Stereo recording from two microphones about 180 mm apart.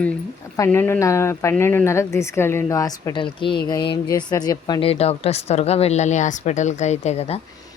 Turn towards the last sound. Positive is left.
turn(degrees=35)  # may be behind; listen again after turning